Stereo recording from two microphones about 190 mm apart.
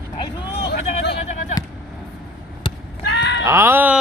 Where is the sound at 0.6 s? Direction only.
60° left (ahead or behind).